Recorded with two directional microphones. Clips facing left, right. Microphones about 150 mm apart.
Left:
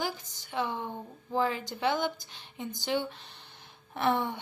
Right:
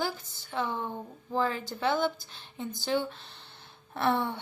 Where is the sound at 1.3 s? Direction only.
15° left (ahead or behind).